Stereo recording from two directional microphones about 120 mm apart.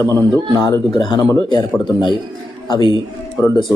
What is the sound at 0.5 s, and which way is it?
Speech, 35° left (ahead or behind).